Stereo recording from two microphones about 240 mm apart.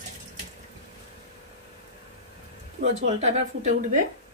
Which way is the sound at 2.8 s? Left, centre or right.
Right.